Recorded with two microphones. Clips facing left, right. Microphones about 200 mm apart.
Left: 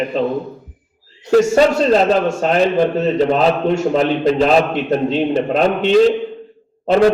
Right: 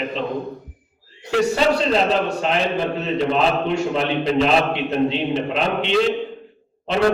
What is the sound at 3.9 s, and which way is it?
A man's voice, 45° left (ahead or behind).